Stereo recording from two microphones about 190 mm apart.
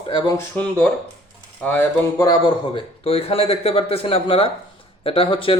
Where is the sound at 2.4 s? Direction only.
30° left (ahead or behind).